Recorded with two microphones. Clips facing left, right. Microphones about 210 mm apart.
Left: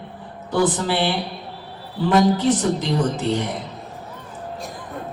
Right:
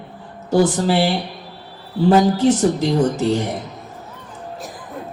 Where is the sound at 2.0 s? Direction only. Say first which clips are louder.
Right 3 dB; 40° right (ahead or behind).